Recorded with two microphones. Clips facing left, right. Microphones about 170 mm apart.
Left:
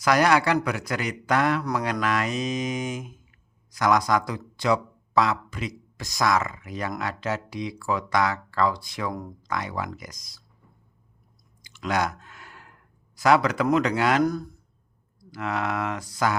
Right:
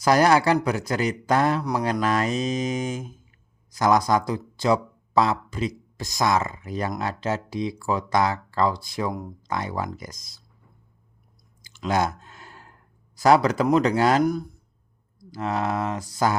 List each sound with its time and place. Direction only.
0.0 s speech: 30° right (ahead or behind)
11.8 s a sound: 25° right (ahead or behind)
15.3 s speech: 30° right (ahead or behind)